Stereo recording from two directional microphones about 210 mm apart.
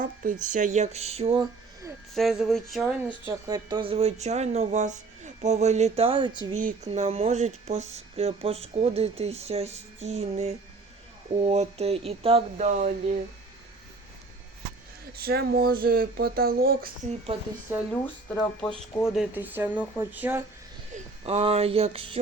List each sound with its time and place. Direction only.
0.0 s speech: 40° right (ahead or behind)
2.1 s speech: centre (ahead or behind)
3.2 s speech: 15° right (ahead or behind)
6.6 s speech: 35° right (ahead or behind)
15.1 s speech: 45° right (ahead or behind)
17.7 s speech: 10° right (ahead or behind)
18.0 s speech: 5° left (ahead or behind)
20.9 s speech: 30° right (ahead or behind)